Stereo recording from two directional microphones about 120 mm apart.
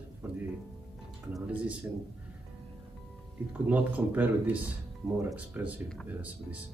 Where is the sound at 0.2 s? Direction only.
20° right (ahead or behind).